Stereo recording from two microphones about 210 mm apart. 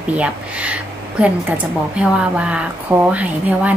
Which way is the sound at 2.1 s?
5° right (ahead or behind).